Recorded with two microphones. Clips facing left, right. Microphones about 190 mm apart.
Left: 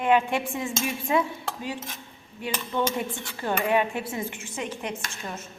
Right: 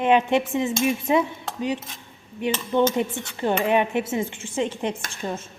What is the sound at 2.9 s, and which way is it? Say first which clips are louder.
A woman's voice: right 6 dB; 20° right (ahead or behind).